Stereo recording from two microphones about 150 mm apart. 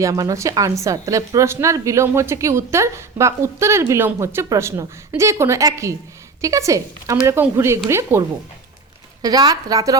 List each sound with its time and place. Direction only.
0.0 s a woman's voice: 20° right (ahead or behind)
9.2 s a woman's voice: 25° right (ahead or behind)